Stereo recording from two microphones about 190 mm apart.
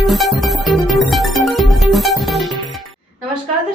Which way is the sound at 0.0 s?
Centre (ahead or behind).